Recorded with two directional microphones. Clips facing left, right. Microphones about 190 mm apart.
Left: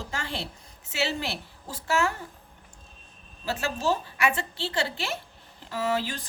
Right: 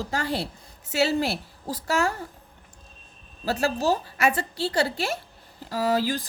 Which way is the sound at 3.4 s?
40° right (ahead or behind).